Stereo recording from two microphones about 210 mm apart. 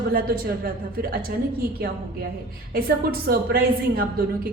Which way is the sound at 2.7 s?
45° right (ahead or behind).